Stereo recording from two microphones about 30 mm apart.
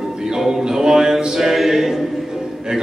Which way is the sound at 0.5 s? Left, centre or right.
Right.